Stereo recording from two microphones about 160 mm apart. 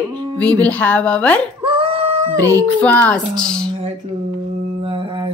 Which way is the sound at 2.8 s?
10° left (ahead or behind).